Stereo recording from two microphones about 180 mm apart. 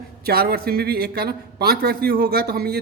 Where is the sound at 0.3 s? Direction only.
60° right (ahead or behind).